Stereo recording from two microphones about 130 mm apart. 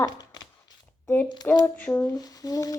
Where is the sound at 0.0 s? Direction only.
30° left (ahead or behind).